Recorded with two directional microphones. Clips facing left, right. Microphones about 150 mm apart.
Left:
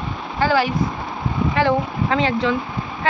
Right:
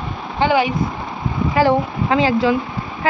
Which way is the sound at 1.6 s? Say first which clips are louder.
Right 4 dB; 30° right (ahead or behind).